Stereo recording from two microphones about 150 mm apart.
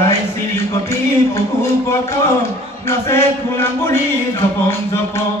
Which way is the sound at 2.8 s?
15° left (ahead or behind).